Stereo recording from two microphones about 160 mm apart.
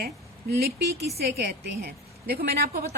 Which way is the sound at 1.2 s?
85° right.